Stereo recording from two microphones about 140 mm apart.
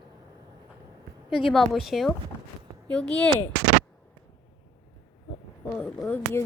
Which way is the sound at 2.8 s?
10° left (ahead or behind).